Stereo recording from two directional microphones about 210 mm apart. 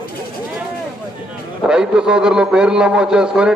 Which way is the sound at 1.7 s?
5° right (ahead or behind).